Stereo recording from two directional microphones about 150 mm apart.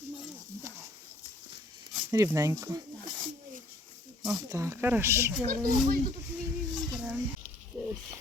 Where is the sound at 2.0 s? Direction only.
20° right (ahead or behind).